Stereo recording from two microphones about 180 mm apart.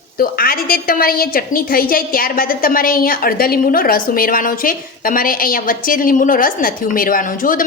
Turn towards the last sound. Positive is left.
turn(degrees=50)  # may be behind; listen again after turning